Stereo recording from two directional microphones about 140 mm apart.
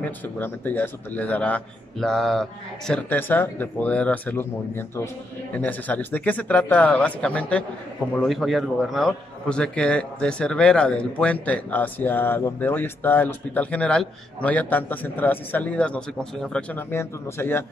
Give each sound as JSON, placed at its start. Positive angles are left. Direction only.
{"t": 0.0, "sound": "a man's voice", "side_deg": 15}
{"t": 16.9, "sound": "a man's voice", "side_deg": 15}